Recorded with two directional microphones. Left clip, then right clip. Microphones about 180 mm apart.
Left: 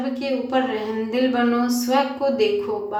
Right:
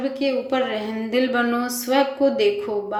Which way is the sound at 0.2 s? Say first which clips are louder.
Even; 15° right (ahead or behind).